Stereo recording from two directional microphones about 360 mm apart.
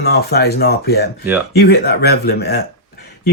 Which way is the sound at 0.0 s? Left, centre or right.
Left.